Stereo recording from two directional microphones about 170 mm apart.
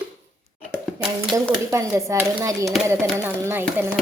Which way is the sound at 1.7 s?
15° right (ahead or behind).